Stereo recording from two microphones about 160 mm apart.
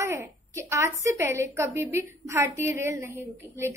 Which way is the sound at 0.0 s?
15° right (ahead or behind).